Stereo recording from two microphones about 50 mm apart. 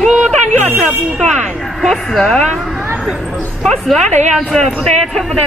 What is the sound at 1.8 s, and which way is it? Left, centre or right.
Speech, centre.